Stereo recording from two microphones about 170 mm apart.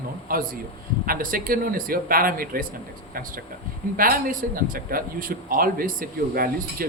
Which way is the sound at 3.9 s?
55° right (ahead or behind).